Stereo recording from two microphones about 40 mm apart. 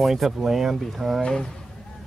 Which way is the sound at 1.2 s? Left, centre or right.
Centre.